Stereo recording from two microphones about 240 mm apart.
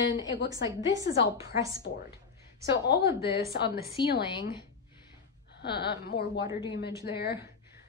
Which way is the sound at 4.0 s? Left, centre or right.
Centre.